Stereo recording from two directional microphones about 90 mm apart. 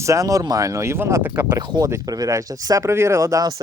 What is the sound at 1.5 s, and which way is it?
Speech, 45° right (ahead or behind).